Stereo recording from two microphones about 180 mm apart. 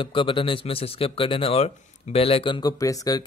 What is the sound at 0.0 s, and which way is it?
A man's voice, 30° left (ahead or behind).